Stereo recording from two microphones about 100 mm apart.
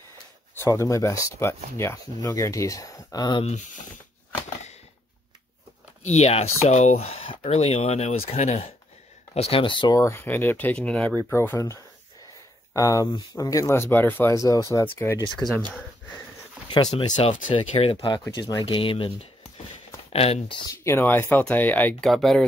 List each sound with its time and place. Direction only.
0.6 s speech: 30° left (ahead or behind)
6.0 s speech: 90° left; by 9.9 s 55° left (ahead or behind)
9.9 s speech: 25° left (ahead or behind)
11.3 s speech: 25° left (ahead or behind)
13.7 s speech: 20° left (ahead or behind)
14.3 s speech: 35° left (ahead or behind)
15.4 s speech: centre (ahead or behind)
16.7 s speech: 45° left (ahead or behind)
17.2 s speech: 60° left (ahead or behind); by 18.0 s 75° left (ahead or behind)
18.6 s speech: 55° left (ahead or behind)
20.1 s speech: 90° left
20.8 s speech: 25° left (ahead or behind)
22.0 s speech: 5° left (ahead or behind)